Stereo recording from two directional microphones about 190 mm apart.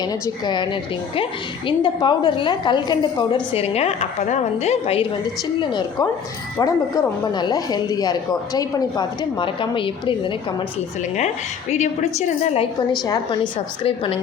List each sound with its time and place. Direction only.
0.0 s a woman's voice: 20° left (ahead or behind)
11.7 s a woman's voice: 35° left (ahead or behind)
13.1 s a woman's voice: 25° left (ahead or behind)